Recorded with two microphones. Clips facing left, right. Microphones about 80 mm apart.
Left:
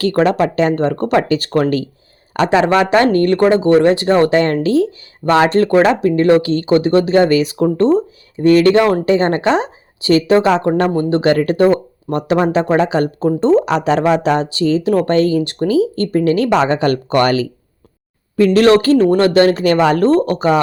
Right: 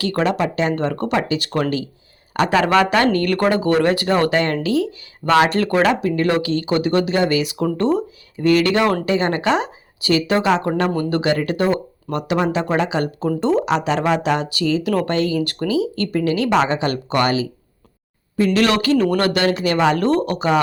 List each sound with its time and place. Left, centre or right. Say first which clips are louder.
0.0 s speech: left 6 dB; left
0.7 s speech: left 5 dB; left
2.5 s speech: left 4 dB; left
11.2 s speech: left 9 dB; left
13.7 s speech: left 4 dB; left
18.3 s speech: left 7 dB; left